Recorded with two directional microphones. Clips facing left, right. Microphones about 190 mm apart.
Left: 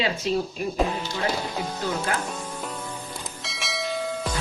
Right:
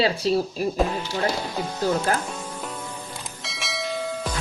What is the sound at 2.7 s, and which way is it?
Bell, 5° right (ahead or behind).